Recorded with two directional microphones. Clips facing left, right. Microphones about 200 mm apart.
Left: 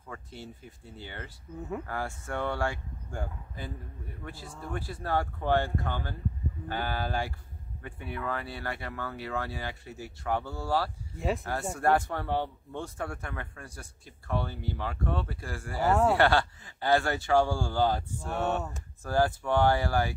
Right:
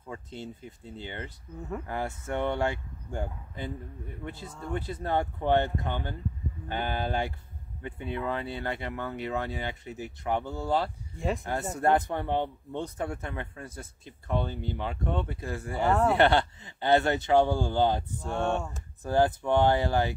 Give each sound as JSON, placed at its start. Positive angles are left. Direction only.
{"t": 0.1, "sound": "speech", "side_deg": -20}
{"t": 11.1, "sound": "speech", "side_deg": 0}
{"t": 11.7, "sound": "speech", "side_deg": -20}
{"t": 18.3, "sound": "speech", "side_deg": 5}
{"t": 19.0, "sound": "speech", "side_deg": -20}